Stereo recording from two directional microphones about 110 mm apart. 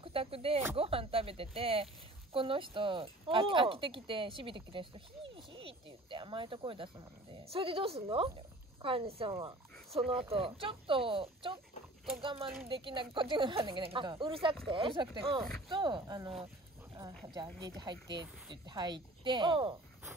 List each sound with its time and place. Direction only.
0.0 s speech: 60° right (ahead or behind); by 16.3 s 40° right (ahead or behind)
17.6 s speech: 40° right (ahead or behind)